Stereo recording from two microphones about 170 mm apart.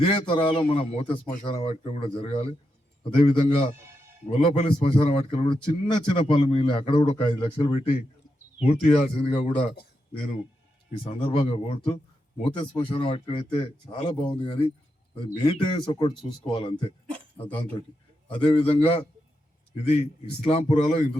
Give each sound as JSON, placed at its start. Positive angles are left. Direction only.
{"t": 0.0, "sound": "a man's voice", "side_deg": 35}
{"t": 11.0, "sound": "a man's voice", "side_deg": 30}
{"t": 17.1, "sound": "a sound", "side_deg": 10}
{"t": 18.3, "sound": "a man's voice", "side_deg": 30}